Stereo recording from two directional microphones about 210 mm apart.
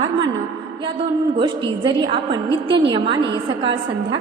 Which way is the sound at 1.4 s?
25° right (ahead or behind).